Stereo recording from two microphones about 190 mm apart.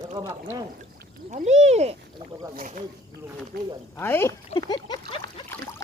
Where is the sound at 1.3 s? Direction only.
35° right (ahead or behind); by 3.7 s 55° right (ahead or behind).